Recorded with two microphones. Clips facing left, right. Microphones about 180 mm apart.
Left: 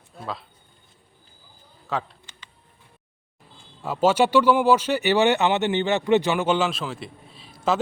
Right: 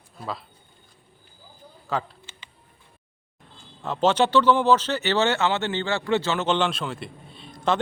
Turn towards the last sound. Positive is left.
turn(degrees=5)  # may be behind; listen again after turning